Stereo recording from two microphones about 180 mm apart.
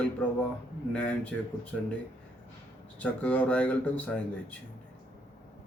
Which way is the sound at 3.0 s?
5° left (ahead or behind).